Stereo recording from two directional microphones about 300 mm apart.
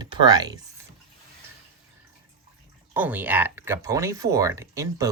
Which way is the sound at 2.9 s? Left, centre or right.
Centre.